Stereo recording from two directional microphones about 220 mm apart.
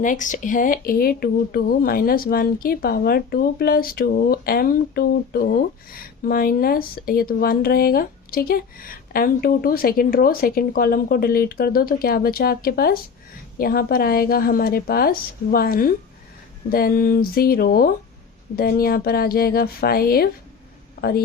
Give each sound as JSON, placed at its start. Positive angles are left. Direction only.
{"t": 0.0, "sound": "speech", "side_deg": 35}